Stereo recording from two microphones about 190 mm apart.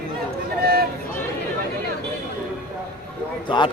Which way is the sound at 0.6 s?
55° right (ahead or behind).